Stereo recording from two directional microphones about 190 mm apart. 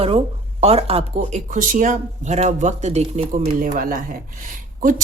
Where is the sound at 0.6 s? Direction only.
30° right (ahead or behind).